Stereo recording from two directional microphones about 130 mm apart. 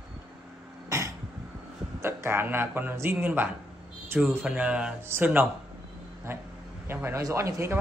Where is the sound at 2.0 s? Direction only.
20° right (ahead or behind).